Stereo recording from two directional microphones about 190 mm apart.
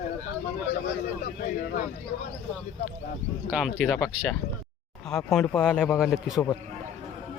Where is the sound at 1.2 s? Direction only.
45° left (ahead or behind).